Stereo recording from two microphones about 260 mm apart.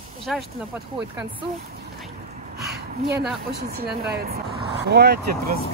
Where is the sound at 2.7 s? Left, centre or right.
Right.